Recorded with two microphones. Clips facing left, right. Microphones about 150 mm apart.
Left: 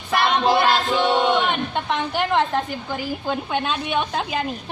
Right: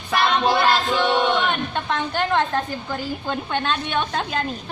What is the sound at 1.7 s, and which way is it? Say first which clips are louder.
A woman's voice: left 1 dB; centre (ahead or behind).